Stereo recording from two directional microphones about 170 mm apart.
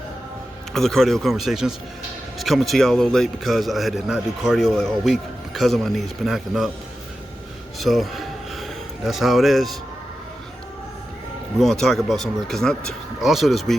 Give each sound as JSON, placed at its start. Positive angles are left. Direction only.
{"t": 0.7, "sound": "a man's voice", "side_deg": 0}
{"t": 7.8, "sound": "a sound", "side_deg": 0}
{"t": 11.6, "sound": "a man's voice", "side_deg": 5}